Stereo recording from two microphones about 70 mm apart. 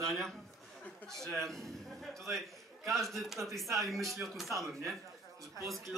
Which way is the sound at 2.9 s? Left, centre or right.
Centre.